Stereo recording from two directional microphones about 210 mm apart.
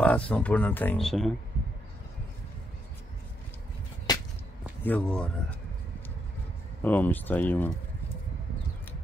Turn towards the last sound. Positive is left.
turn(degrees=10)  # may be behind; listen again after turning